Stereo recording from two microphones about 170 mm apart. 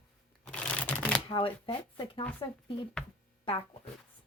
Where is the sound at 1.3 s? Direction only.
30° left (ahead or behind).